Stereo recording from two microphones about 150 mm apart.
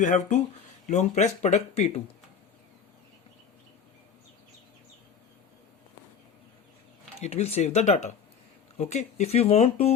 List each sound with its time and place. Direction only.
0.0 s speech: 60° left (ahead or behind)
7.2 s speech: 45° left (ahead or behind)